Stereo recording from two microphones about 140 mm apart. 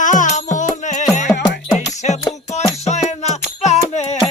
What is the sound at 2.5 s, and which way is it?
Music, 55° left (ahead or behind).